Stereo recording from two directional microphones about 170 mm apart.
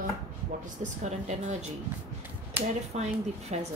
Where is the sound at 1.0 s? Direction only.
45° right (ahead or behind).